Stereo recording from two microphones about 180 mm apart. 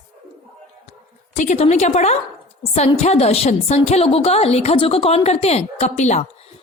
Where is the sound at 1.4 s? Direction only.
40° left (ahead or behind).